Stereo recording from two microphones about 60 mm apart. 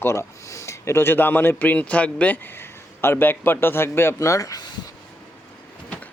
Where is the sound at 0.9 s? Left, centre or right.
Left.